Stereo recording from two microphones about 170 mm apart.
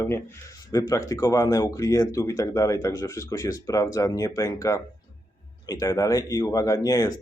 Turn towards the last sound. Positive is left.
turn(degrees=20)  # may be behind; listen again after turning